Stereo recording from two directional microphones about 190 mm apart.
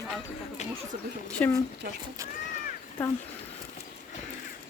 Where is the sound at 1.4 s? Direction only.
10° left (ahead or behind).